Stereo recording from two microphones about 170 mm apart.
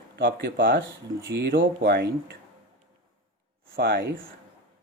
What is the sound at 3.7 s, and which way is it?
Speech, 65° right (ahead or behind).